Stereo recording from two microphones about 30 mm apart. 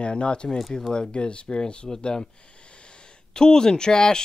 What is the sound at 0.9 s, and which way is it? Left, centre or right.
Speech, left.